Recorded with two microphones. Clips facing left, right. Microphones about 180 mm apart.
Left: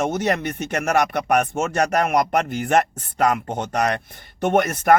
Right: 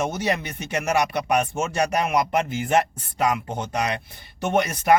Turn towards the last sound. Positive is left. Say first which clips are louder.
# left 2 dB
turn(degrees=55)  # may be behind; listen again after turning